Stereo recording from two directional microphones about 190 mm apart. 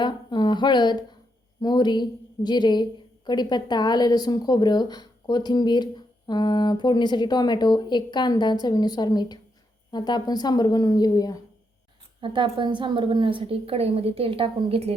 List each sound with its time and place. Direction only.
0.0 s speech: 25° left (ahead or behind)
12.2 s a woman's voice: 25° right (ahead or behind)